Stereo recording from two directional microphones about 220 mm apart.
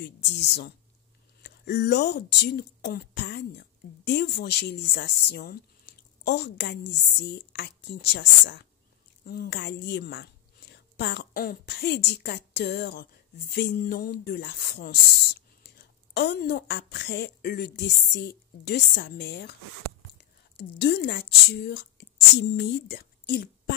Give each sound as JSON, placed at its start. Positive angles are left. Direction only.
{"t": 1.4, "sound": "speech", "side_deg": 50}